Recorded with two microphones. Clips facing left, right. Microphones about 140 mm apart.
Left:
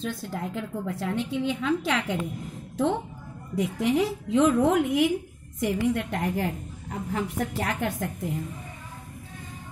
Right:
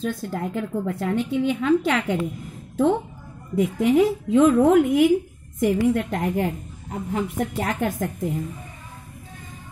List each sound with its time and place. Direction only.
0.0 s a woman's voice: 45° right (ahead or behind)
3.5 s a woman's voice: 45° right (ahead or behind); by 7.6 s 25° right (ahead or behind)
7.6 s a woman's voice: 45° right (ahead or behind)